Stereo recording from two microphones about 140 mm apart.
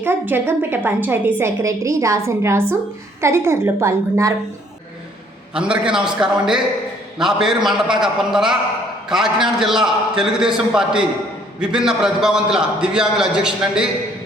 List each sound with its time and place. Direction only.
0.0 s a woman's voice: 15° right (ahead or behind)
5.5 s a woman's voice: 5° right (ahead or behind)